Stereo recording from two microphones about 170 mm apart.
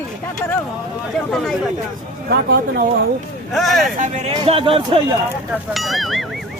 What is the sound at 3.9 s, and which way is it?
Speech, 45° right (ahead or behind).